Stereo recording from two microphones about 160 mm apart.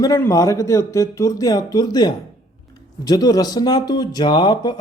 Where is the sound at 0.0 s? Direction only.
20° left (ahead or behind).